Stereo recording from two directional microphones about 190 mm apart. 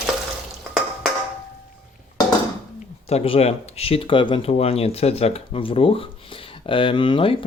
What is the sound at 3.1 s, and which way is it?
Speech, 30° left (ahead or behind).